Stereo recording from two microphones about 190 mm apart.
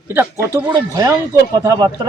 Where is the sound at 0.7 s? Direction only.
20° right (ahead or behind).